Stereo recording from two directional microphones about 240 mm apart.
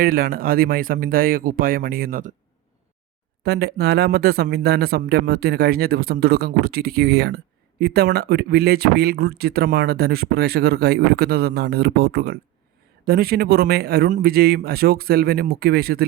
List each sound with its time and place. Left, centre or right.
0.0 s speech: right
3.4 s speech: right